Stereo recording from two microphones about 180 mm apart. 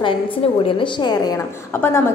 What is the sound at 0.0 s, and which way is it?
A woman's voice, 30° left (ahead or behind).